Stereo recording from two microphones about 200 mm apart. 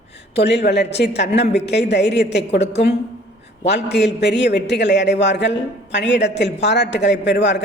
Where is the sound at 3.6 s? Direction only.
55° left (ahead or behind).